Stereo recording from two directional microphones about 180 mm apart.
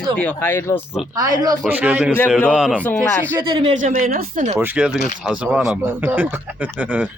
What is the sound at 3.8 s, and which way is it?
Speech, 45° right (ahead or behind).